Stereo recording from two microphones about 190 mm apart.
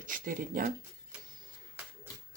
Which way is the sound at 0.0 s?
45° right (ahead or behind).